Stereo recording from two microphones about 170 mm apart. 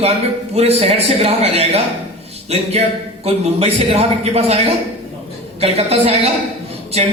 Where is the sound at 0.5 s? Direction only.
40° right (ahead or behind).